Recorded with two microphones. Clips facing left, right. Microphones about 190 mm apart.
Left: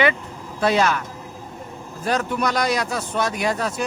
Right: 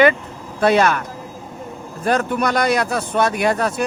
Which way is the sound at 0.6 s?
60° right (ahead or behind).